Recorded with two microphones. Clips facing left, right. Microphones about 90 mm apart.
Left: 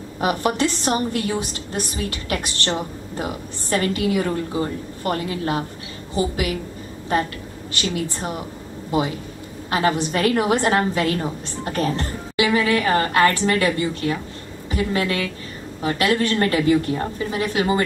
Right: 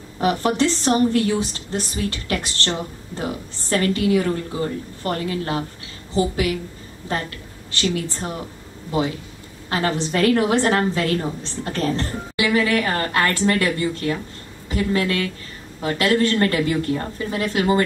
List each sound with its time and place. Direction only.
0.2 s a woman's voice: 20° left (ahead or behind)
3.7 s a woman's voice: 20° left (ahead or behind)
7.9 s a woman's voice: 20° left (ahead or behind)
9.7 s a woman's voice: 20° left (ahead or behind)